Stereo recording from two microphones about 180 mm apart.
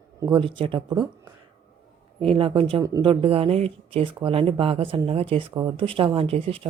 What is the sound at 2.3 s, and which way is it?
Speech, 30° right (ahead or behind).